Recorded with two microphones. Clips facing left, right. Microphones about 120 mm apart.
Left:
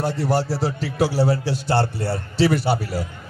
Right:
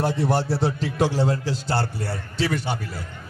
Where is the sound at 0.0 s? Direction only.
Centre (ahead or behind).